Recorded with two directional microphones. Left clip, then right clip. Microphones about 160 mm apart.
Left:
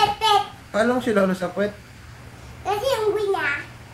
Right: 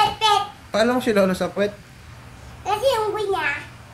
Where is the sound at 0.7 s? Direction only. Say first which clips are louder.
Right 1 dB; 30° right (ahead or behind).